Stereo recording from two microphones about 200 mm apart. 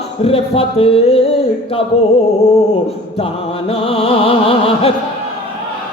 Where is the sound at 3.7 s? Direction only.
25° left (ahead or behind).